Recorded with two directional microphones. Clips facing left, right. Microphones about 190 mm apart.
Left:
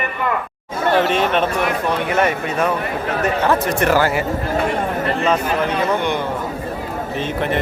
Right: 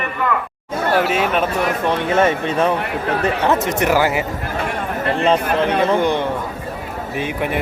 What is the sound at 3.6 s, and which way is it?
Speech, 15° right (ahead or behind).